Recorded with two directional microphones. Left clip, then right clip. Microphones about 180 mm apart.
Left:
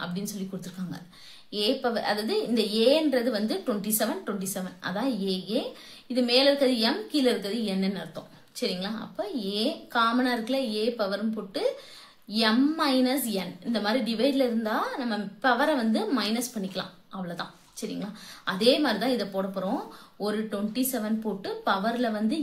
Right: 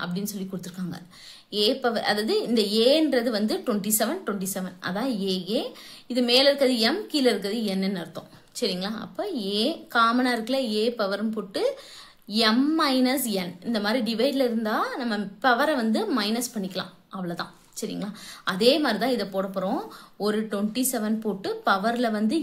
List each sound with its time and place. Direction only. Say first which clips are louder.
0.0 s a woman's voice: right 2 dB; 35° right (ahead or behind)